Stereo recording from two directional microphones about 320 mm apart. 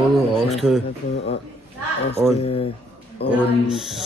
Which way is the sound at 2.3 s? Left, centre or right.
Centre.